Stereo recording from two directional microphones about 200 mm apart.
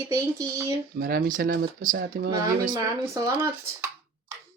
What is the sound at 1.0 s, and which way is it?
Speech, 45° right (ahead or behind).